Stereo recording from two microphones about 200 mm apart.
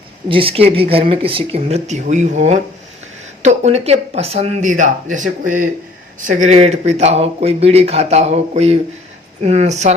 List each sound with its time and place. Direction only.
0.3 s speech: 25° right (ahead or behind)